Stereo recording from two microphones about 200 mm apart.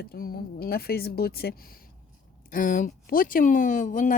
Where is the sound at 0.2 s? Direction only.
50° left (ahead or behind).